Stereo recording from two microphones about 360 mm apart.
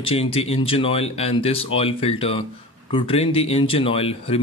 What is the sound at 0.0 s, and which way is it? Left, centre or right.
Speech, centre.